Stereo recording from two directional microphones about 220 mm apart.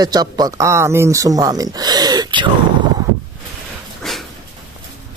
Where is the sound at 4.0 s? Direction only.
Centre (ahead or behind).